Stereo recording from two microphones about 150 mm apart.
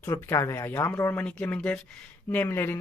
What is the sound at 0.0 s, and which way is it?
Speech, 15° left (ahead or behind).